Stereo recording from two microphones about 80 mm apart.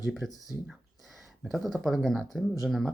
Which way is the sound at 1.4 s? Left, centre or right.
Centre.